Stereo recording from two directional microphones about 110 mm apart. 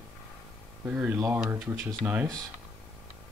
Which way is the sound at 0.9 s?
15° right (ahead or behind).